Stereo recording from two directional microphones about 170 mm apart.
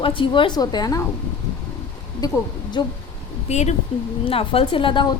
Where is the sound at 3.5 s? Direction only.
40° left (ahead or behind).